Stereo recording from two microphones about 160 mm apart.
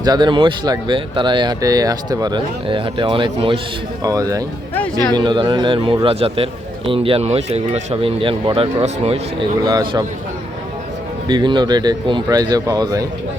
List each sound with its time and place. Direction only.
0.0 s speech: 25° right (ahead or behind)
4.0 s a man's voice: 20° right (ahead or behind); by 9.5 s 40° right (ahead or behind)
9.6 s speech: 25° right (ahead or behind)
11.3 s speech: 30° right (ahead or behind)